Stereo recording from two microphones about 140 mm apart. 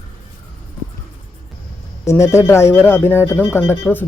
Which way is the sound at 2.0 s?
20° left (ahead or behind).